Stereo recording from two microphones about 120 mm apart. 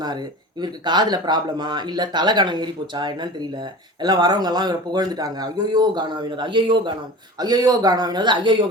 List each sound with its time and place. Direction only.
0.0 s speech: 35° right (ahead or behind)